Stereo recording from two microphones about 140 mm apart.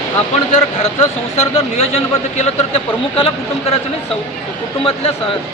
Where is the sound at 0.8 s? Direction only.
50° left (ahead or behind).